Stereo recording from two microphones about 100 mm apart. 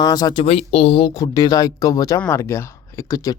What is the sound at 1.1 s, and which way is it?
Speech, 35° left (ahead or behind).